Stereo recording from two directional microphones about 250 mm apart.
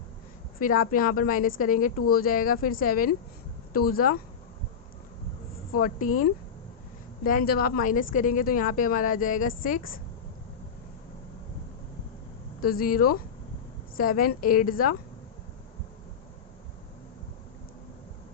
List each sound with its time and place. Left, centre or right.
0.6 s speech: left
5.7 s speech: left
7.3 s speech: left
12.6 s speech: left